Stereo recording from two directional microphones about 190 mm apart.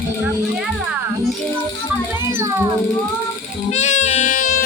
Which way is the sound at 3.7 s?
40° left (ahead or behind).